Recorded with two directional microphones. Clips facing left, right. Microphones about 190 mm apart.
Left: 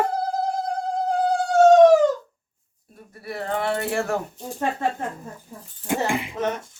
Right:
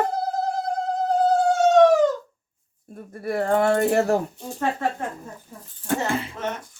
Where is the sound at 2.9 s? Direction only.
50° right (ahead or behind).